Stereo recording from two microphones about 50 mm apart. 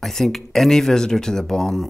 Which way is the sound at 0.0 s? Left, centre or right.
Centre.